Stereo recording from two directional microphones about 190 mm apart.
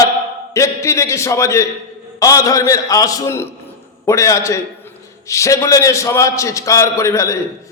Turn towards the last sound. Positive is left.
turn(degrees=15)  # may be behind; listen again after turning